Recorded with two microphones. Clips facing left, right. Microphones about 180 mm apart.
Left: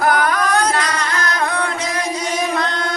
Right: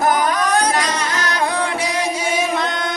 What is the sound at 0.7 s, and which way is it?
Music, 15° right (ahead or behind).